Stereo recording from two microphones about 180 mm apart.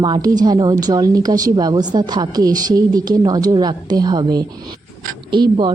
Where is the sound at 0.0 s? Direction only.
25° right (ahead or behind).